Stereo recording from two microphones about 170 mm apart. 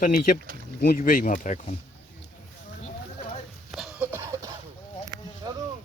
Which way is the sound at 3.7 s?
Centre (ahead or behind).